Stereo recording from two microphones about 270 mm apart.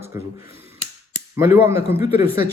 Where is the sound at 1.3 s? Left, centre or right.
Centre.